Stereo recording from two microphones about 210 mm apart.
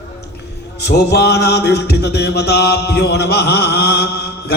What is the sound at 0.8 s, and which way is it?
Mantra, 50° left (ahead or behind).